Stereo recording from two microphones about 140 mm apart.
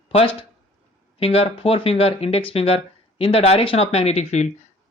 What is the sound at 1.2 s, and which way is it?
Speech, 40° left (ahead or behind).